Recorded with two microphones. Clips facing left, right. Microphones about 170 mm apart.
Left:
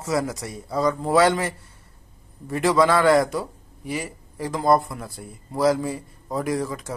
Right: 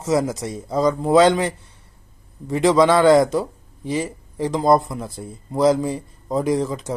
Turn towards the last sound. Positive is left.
turn(degrees=-20)  # may be behind; listen again after turning